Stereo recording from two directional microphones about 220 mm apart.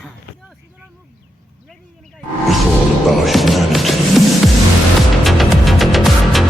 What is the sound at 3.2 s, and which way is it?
Music, centre (ahead or behind).